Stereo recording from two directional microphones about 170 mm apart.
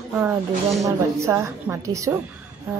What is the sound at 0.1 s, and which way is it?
A woman's voice, 10° right (ahead or behind).